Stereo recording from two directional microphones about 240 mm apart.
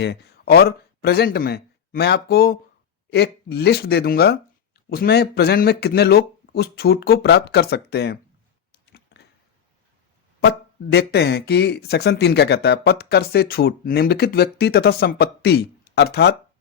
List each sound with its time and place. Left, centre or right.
0.0 s speech: left
8.7 s a sound: left
10.9 s speech: left